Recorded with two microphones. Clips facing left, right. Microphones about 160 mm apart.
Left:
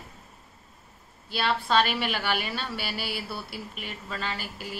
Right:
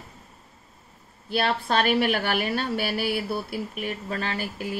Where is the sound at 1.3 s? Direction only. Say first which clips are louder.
Right 1 dB; 50° right (ahead or behind).